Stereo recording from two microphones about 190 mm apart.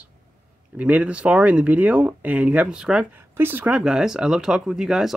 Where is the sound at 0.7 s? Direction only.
5° right (ahead or behind).